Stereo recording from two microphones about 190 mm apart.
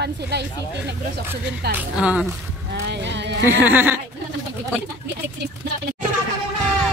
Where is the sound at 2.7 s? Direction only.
65° right (ahead or behind).